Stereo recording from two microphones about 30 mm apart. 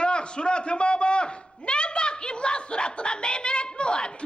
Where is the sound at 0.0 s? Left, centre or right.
Left.